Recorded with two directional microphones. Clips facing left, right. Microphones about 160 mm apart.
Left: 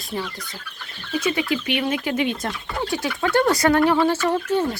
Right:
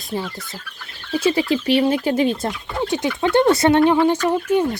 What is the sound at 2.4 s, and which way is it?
Speech, 20° right (ahead or behind).